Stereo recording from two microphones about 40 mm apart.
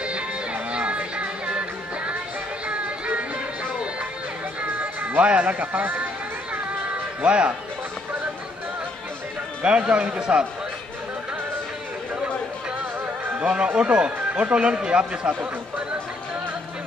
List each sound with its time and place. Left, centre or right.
0.0 s music: right
7.2 s speech: right
9.6 s a man's voice: right
13.4 s a man's voice: right